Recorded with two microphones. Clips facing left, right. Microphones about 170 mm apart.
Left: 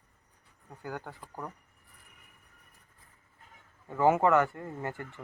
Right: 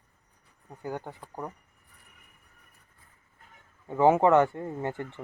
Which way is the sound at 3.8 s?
15° right (ahead or behind).